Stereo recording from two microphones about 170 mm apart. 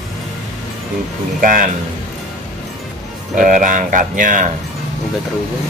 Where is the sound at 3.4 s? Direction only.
50° right (ahead or behind).